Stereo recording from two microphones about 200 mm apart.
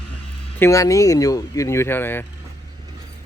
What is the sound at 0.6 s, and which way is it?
Speech, 15° left (ahead or behind).